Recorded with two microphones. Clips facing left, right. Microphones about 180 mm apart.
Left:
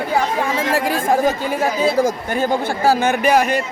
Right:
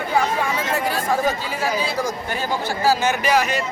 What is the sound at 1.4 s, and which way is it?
A man's voice, 50° left (ahead or behind).